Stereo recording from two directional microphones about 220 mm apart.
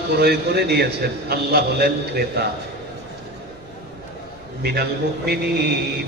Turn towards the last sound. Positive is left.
turn(degrees=-45)  # may be behind; listen again after turning